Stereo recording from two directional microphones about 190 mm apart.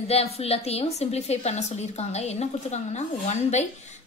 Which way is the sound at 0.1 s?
30° left (ahead or behind).